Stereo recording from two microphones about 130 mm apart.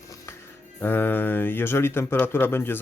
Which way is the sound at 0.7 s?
15° left (ahead or behind).